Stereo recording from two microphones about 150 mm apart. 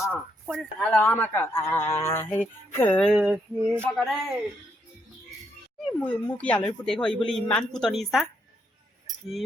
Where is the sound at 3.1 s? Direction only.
5° right (ahead or behind).